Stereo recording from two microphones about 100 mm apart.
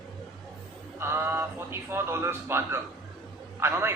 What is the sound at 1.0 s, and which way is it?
Speech, 25° right (ahead or behind).